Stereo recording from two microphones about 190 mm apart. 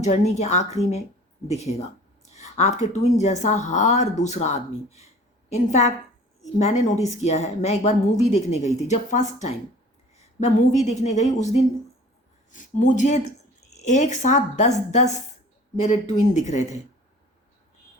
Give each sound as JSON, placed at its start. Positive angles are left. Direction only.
{"t": 0.0, "sound": "speech", "side_deg": 35}